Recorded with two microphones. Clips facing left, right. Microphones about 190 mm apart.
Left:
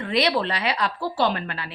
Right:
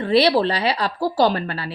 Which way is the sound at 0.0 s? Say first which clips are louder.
Right 6 dB; 30° right (ahead or behind).